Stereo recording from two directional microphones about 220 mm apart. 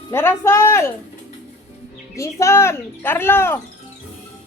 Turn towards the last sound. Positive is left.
turn(degrees=10)  # may be behind; listen again after turning